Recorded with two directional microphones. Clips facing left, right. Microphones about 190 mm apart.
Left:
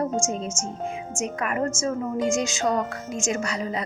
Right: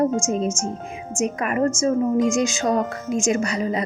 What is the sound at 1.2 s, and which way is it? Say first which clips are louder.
Speech: right 5 dB; 20° right (ahead or behind).